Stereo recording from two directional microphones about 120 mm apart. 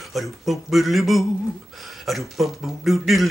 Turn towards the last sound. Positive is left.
turn(degrees=0)  # may be behind; listen again after turning